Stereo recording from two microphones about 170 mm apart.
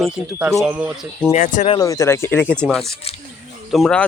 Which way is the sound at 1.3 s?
45° left (ahead or behind).